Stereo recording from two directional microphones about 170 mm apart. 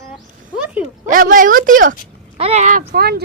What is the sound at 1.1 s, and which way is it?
Speech, 50° right (ahead or behind).